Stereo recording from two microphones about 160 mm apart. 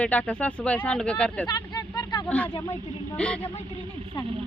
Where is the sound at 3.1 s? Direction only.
5° left (ahead or behind).